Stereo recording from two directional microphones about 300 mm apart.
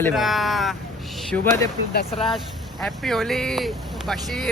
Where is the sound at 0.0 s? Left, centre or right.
Centre.